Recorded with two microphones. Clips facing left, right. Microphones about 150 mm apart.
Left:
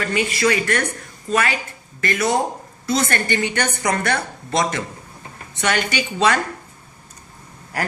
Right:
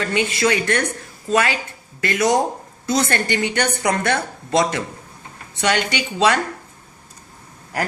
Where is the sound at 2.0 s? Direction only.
20° right (ahead or behind).